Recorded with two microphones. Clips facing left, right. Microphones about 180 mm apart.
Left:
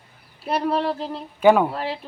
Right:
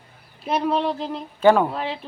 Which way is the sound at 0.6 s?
10° left (ahead or behind).